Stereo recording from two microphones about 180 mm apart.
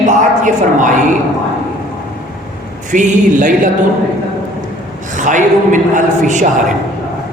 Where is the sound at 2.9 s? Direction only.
45° right (ahead or behind).